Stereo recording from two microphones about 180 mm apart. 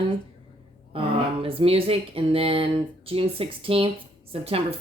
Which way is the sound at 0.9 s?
30° right (ahead or behind).